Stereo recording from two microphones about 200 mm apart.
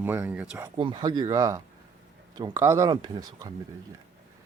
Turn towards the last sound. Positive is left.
turn(degrees=-20)  # may be behind; listen again after turning